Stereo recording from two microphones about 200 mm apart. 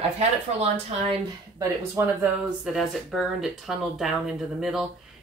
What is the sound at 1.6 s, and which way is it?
Speech, 15° right (ahead or behind).